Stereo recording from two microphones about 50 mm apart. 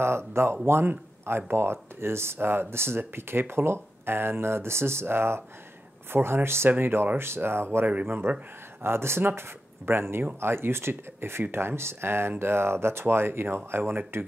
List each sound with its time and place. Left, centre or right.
0.0 s speech: right
7.8 s speech: right
8.8 s speech: right